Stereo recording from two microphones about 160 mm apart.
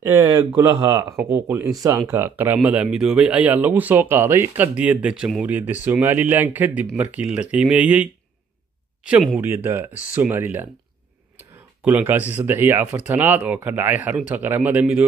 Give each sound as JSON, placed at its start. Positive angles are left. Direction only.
{"t": 0.0, "sound": "speech", "side_deg": -20}
{"t": 9.3, "sound": "speech", "side_deg": -10}
{"t": 11.8, "sound": "speech", "side_deg": -10}